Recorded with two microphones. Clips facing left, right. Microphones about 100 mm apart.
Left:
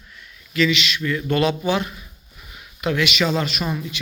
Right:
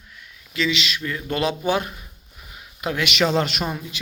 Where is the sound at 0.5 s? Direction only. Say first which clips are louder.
Left 4 dB; 25° right (ahead or behind).